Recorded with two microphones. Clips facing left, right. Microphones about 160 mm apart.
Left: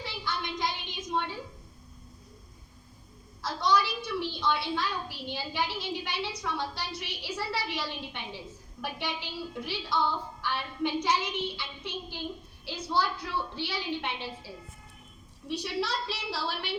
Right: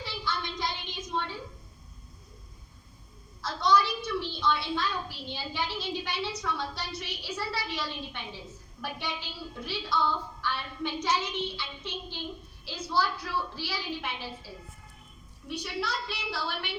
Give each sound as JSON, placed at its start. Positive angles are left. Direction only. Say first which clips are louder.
{"t": 0.0, "sound": "a sound", "louder": "right 1 dB", "side_deg": 15}
{"t": 3.4, "sound": "a woman's voice", "louder": "right 2 dB", "side_deg": 15}
{"t": 15.4, "sound": "a woman's voice", "louder": "left 2 dB", "side_deg": 30}